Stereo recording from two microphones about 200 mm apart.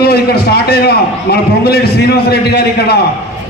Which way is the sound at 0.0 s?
50° left (ahead or behind).